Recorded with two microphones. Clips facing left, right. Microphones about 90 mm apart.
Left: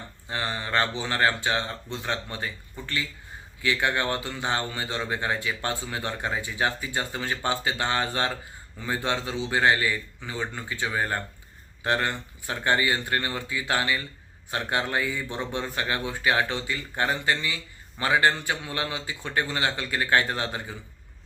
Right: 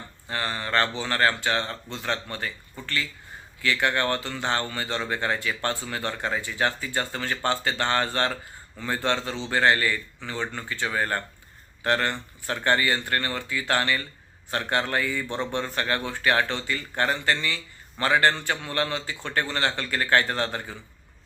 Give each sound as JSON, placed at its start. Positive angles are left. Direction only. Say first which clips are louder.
{"t": 0.3, "sound": "speech", "louder": "right 1 dB", "side_deg": 20}